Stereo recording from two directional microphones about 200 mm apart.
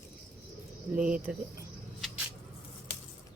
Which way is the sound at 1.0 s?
5° right (ahead or behind).